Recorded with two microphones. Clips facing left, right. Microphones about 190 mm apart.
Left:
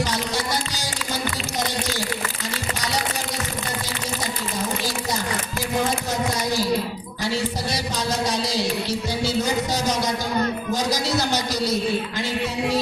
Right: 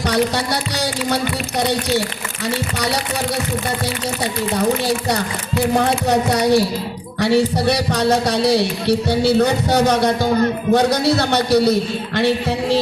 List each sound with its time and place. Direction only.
0.0 s speech: 65° right (ahead or behind)
4.5 s speech: 65° right (ahead or behind)